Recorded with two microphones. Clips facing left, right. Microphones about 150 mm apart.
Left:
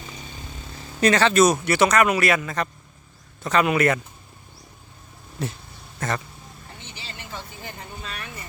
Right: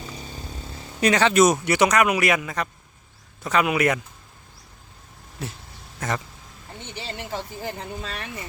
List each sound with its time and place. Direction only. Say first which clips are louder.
0.9 s speech: even; 15° right (ahead or behind)
5.4 s dog: left 4 dB; 5° right (ahead or behind)
6.0 s speech: even; 10° right (ahead or behind)
6.8 s a sound: right 8 dB; 60° right (ahead or behind)
7.3 s speech: right 5 dB; 35° right (ahead or behind)